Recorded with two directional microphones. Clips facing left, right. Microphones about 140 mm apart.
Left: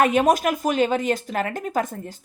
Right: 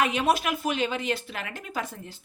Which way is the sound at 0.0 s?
45° left (ahead or behind).